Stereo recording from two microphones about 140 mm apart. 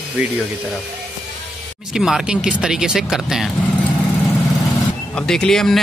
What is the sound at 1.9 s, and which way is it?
Speech, 5° right (ahead or behind).